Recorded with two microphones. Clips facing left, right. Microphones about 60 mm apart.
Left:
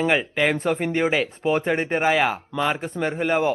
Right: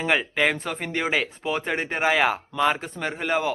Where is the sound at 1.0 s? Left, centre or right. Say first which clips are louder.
Left 2 dB; centre.